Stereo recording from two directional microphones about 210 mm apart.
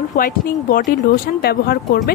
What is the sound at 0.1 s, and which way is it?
A woman's voice, 40° left (ahead or behind).